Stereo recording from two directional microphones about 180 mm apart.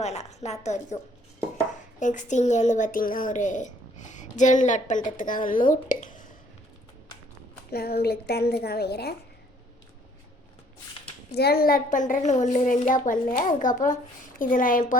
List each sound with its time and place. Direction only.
0.0 s a woman's voice: 40° left (ahead or behind)
2.0 s speech: 45° left (ahead or behind)
7.7 s a woman's voice: 60° left (ahead or behind)
11.3 s speech: 60° left (ahead or behind)